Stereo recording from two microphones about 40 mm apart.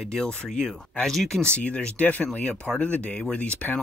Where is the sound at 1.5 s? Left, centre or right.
Left.